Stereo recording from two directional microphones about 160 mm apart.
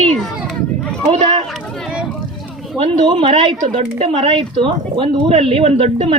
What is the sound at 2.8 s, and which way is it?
A woman's voice, 35° right (ahead or behind).